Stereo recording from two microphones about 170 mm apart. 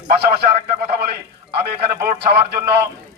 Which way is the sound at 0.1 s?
70° right (ahead or behind).